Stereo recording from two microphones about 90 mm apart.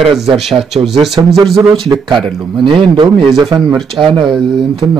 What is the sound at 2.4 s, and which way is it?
Speech, 65° right (ahead or behind).